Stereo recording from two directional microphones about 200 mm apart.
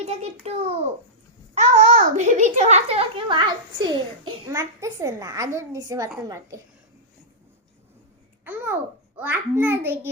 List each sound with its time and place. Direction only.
0.4 s a child's voice: 30° right (ahead or behind); by 6.6 s 15° right (ahead or behind)
9.1 s a child's voice: 10° right (ahead or behind)